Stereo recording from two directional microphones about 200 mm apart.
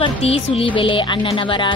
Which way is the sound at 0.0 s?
30° left (ahead or behind).